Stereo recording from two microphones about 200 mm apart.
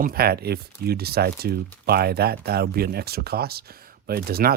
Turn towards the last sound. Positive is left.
turn(degrees=-50)  # may be behind; listen again after turning